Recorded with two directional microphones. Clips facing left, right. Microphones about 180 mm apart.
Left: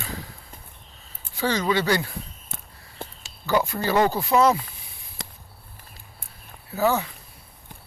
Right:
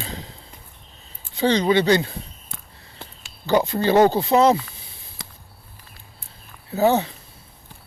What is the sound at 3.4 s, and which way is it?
Speech, 25° right (ahead or behind).